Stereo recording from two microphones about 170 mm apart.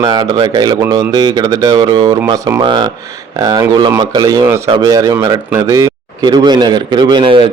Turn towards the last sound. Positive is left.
turn(degrees=-30)  # may be behind; listen again after turning